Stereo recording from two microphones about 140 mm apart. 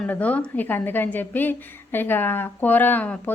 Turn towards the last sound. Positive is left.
turn(degrees=10)  # may be behind; listen again after turning